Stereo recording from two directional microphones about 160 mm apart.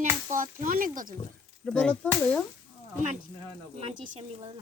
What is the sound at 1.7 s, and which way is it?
Speech, 5° left (ahead or behind).